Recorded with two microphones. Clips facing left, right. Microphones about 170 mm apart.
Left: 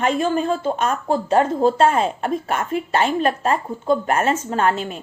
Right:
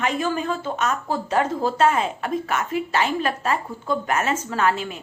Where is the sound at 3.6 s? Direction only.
25° left (ahead or behind).